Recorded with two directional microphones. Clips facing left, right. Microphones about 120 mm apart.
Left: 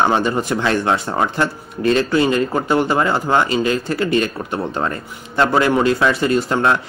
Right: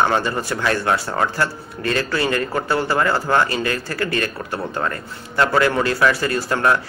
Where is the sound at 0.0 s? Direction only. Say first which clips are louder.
Left 3 dB; 20° left (ahead or behind).